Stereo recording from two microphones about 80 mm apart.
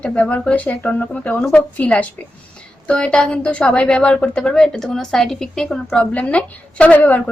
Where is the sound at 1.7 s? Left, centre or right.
Centre.